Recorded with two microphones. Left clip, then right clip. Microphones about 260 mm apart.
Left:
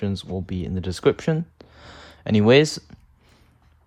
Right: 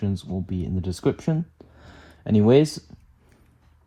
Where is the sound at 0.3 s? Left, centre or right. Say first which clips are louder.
Left 1 dB; right.